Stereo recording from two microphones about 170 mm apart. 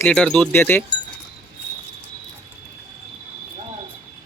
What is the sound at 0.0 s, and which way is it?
Speech, 5° left (ahead or behind).